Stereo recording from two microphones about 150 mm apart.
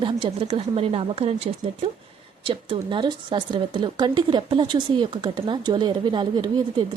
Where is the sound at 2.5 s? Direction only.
35° right (ahead or behind).